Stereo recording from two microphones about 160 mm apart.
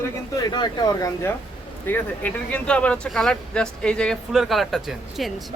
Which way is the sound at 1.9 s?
10° left (ahead or behind).